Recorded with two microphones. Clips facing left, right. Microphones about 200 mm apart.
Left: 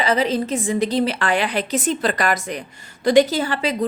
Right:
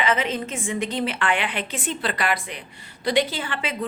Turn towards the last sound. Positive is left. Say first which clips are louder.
# left 8 dB
turn(degrees=40)  # may be behind; listen again after turning